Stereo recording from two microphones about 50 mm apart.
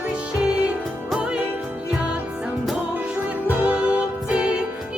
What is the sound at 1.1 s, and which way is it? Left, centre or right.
Music, centre.